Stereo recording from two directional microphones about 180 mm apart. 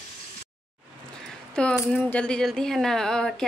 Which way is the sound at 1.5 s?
5° left (ahead or behind).